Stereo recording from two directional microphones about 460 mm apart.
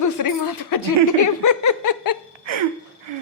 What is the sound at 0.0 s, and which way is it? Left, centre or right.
Chuckle, left.